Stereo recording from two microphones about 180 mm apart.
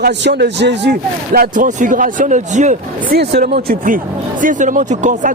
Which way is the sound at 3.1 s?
65° right (ahead or behind).